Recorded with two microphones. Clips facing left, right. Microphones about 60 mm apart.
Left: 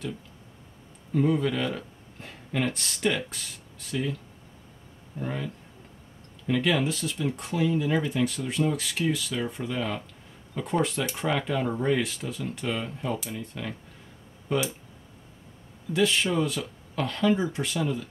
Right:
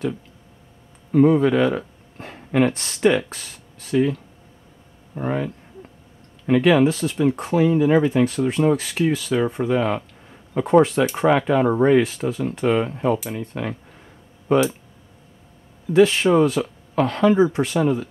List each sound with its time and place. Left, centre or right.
1.1 s speech: right
15.9 s speech: right